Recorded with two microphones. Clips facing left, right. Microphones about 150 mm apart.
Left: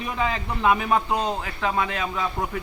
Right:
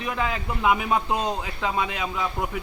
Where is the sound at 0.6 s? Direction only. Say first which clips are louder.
Left 1 dB; 10° right (ahead or behind).